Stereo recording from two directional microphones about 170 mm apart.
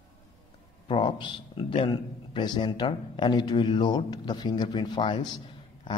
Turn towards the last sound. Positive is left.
turn(degrees=30)  # may be behind; listen again after turning